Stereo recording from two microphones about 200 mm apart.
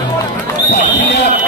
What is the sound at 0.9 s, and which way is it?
Speech, 60° left (ahead or behind).